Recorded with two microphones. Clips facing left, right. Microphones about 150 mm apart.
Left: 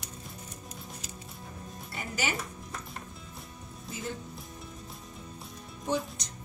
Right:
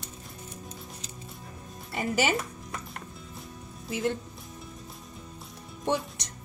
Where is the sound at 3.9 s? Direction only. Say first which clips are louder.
Right 9 dB; 75° right (ahead or behind).